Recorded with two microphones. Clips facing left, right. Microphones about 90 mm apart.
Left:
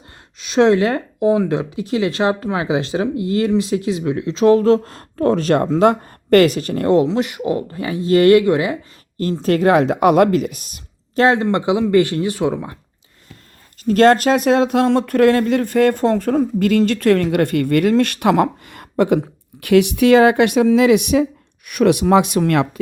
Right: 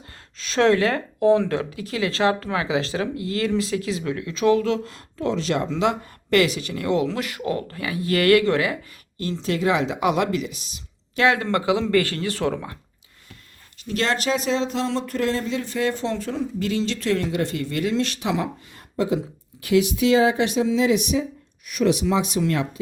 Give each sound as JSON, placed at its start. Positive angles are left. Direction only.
{"t": 0.3, "sound": "speech", "side_deg": 15}
{"t": 9.1, "sound": "speech", "side_deg": 40}
{"t": 11.1, "sound": "speech", "side_deg": 35}
{"t": 11.3, "sound": "speech", "side_deg": 25}
{"t": 13.8, "sound": "speech", "side_deg": 45}